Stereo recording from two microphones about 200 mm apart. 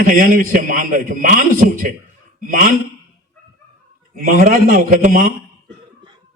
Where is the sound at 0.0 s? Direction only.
40° right (ahead or behind).